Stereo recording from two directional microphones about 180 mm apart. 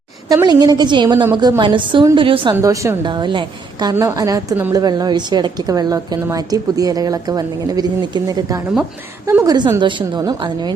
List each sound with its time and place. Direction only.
0.3 s a woman's voice: 20° right (ahead or behind)
2.6 s a woman's voice: 15° right (ahead or behind)